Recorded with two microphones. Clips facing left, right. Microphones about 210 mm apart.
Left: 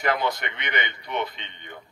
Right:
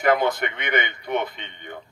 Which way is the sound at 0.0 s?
50° right (ahead or behind).